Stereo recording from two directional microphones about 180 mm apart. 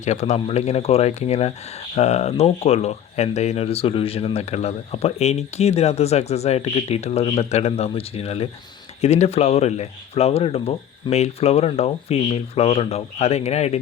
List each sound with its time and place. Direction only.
0.0 s speech: 40° left (ahead or behind)